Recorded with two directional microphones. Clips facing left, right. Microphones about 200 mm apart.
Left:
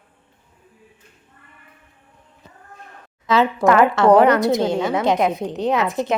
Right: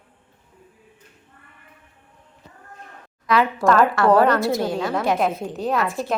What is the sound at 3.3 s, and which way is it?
A woman's voice, 20° left (ahead or behind).